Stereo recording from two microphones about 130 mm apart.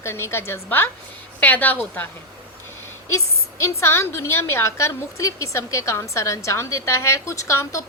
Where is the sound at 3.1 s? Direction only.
20° left (ahead or behind).